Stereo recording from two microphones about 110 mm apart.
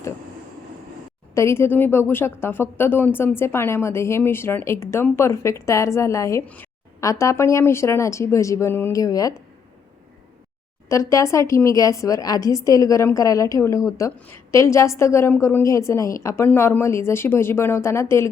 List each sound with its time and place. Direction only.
1.3 s speech: 25° left (ahead or behind)
10.8 s speech: 30° left (ahead or behind)